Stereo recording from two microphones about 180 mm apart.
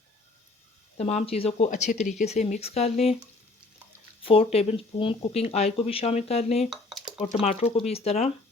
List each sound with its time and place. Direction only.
0.9 s speech: 35° left (ahead or behind)
4.2 s speech: 30° left (ahead or behind)